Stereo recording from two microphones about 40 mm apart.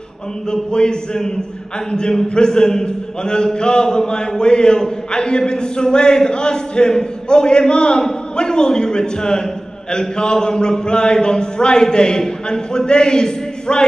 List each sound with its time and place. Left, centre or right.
0.5 s speech: left